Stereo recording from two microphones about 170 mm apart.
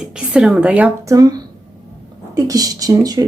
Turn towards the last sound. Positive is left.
turn(degrees=-20)  # may be behind; listen again after turning